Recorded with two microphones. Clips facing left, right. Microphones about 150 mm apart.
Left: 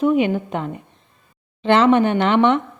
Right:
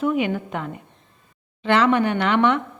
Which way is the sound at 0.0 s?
20° left (ahead or behind).